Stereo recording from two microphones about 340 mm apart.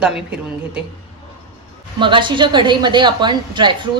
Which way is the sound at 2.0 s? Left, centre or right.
Centre.